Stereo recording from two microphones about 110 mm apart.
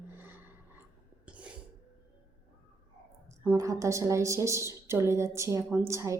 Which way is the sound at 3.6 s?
30° right (ahead or behind).